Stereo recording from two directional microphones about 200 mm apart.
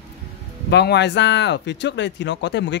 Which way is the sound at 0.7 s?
60° left (ahead or behind).